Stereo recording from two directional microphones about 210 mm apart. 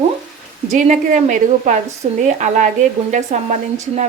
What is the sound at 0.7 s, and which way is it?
Speech, 35° right (ahead or behind).